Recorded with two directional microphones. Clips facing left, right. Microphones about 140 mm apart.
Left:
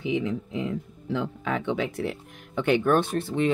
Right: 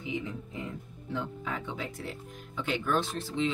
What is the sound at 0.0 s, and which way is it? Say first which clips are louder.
Speech: left 9 dB; 90° left.